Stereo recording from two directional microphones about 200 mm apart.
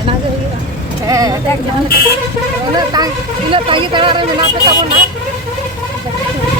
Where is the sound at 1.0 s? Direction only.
15° right (ahead or behind).